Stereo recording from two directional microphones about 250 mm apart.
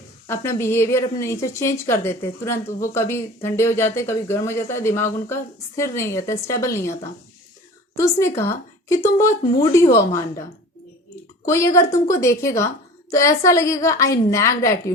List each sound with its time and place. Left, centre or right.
0.3 s speech: centre
7.9 s speech: centre
11.4 s speech: centre